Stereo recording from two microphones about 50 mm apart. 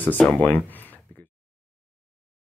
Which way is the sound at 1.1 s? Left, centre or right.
Left.